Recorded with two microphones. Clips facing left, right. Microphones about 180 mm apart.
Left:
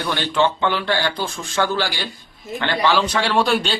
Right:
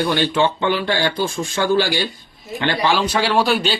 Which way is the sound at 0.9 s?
15° right (ahead or behind).